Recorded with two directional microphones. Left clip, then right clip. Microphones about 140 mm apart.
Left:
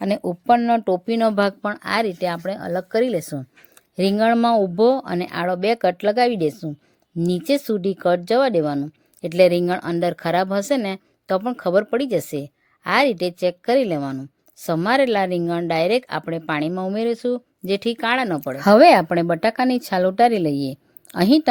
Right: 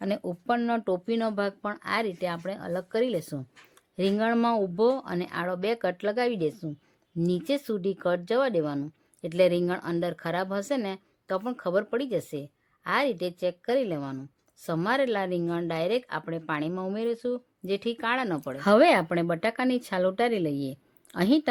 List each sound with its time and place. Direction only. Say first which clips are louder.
0.0 s a woman's voice: left 8 dB; 40° left (ahead or behind)
0.6 s a woman's voice: left 9 dB; 30° left (ahead or behind); by 1.7 s 55° left (ahead or behind)
1.7 s a woman's voice: left 7 dB; 40° left (ahead or behind)